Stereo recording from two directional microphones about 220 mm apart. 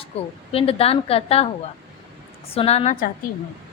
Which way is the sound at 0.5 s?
25° left (ahead or behind).